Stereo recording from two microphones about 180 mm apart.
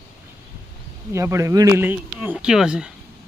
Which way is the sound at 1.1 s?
15° right (ahead or behind).